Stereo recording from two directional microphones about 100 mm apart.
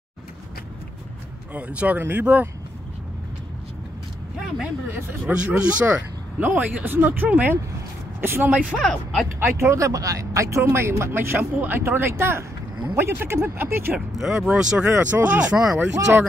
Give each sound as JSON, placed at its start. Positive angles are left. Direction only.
{"t": 1.5, "sound": "speech", "side_deg": -15}
{"t": 5.3, "sound": "speech", "side_deg": -10}
{"t": 8.6, "sound": "speech", "side_deg": 10}
{"t": 9.4, "sound": "speech", "side_deg": -25}
{"t": 13.9, "sound": "speech", "side_deg": 0}
{"t": 14.9, "sound": "speech", "side_deg": -20}
{"t": 15.8, "sound": "speech", "side_deg": -20}